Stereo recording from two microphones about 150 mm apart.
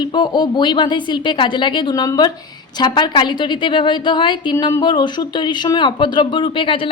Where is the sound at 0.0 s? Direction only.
30° left (ahead or behind).